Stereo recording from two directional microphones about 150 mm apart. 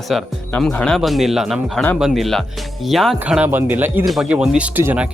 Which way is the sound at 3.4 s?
15° right (ahead or behind).